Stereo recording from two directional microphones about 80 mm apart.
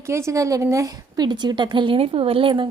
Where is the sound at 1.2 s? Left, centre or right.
Right.